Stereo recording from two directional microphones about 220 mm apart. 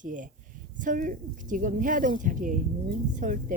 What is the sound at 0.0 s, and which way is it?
Speech, 35° right (ahead or behind).